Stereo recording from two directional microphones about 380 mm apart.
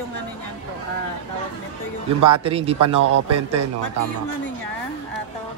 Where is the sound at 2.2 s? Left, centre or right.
Centre.